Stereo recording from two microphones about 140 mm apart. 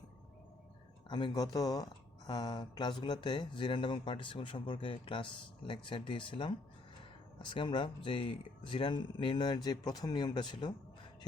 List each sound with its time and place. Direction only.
1.0 s speech: 30° left (ahead or behind)